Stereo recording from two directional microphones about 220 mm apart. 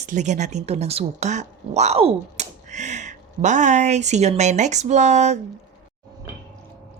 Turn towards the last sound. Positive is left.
turn(degrees=-30)  # may be behind; listen again after turning